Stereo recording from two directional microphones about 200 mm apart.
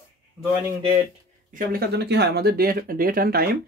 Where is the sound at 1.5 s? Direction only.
45° right (ahead or behind).